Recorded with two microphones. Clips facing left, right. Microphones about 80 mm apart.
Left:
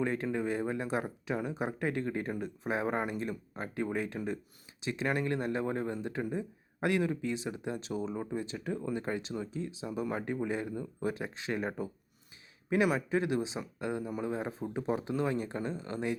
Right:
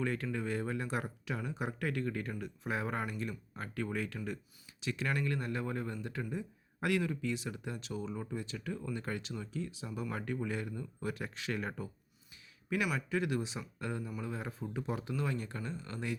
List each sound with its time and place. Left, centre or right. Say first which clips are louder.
0.0 s speech: left 4 dB; left